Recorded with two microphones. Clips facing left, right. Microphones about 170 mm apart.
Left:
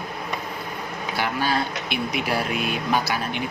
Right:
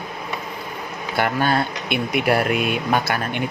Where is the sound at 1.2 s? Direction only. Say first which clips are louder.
Right 5 dB; 55° right (ahead or behind).